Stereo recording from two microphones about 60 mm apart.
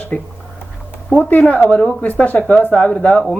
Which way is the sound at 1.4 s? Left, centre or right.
Left.